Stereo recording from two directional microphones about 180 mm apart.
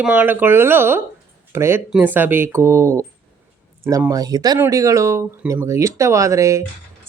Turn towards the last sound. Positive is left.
turn(degrees=-15)  # may be behind; listen again after turning